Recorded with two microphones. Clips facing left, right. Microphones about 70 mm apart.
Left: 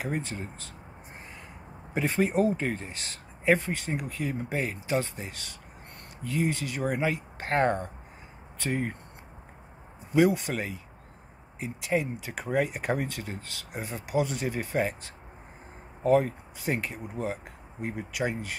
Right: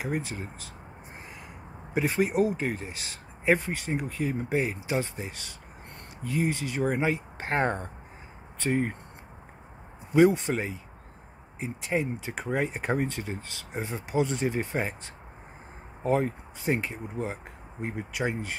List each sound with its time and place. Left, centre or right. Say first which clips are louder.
0.0 s speech: right 1 dB; centre
2.0 s speech: right 1 dB; centre
10.1 s speech: right 2 dB; right
16.0 s speech: left 3 dB; right